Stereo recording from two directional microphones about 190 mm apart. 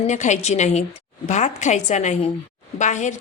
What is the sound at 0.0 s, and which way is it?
A woman's voice, 40° left (ahead or behind).